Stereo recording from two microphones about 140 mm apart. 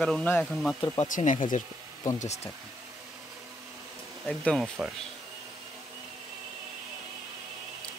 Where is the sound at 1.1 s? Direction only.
65° left (ahead or behind).